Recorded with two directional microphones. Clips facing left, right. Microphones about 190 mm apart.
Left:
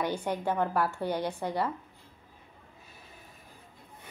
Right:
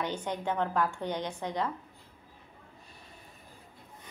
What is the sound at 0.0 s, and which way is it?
A woman's voice, 10° left (ahead or behind).